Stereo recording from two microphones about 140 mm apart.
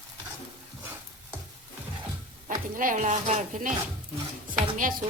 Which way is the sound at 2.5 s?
70° right (ahead or behind).